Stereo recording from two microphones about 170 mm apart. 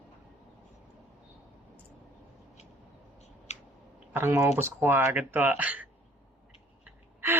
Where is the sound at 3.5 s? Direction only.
40° left (ahead or behind).